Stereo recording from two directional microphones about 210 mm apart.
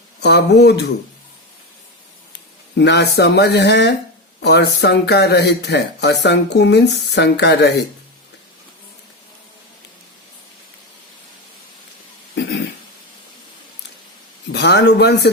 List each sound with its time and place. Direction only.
0.2 s speech: 55° left (ahead or behind)
2.7 s speech: 55° left (ahead or behind)
12.3 s throat clearing: 55° left (ahead or behind)
14.5 s speech: 55° left (ahead or behind)